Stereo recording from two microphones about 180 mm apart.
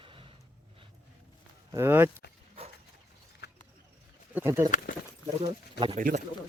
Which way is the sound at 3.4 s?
70° left (ahead or behind).